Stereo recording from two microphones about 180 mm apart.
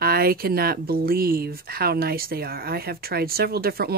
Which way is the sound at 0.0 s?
55° right (ahead or behind).